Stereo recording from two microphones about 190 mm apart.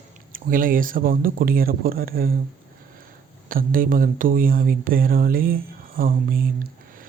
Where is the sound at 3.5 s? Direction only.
45° right (ahead or behind).